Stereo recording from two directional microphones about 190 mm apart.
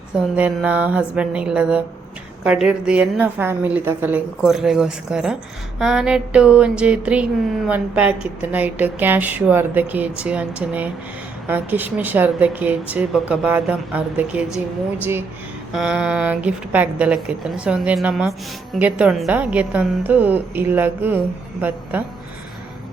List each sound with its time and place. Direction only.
0.3 s a woman's voice: 10° right (ahead or behind)
15.7 s a woman's voice: 5° right (ahead or behind)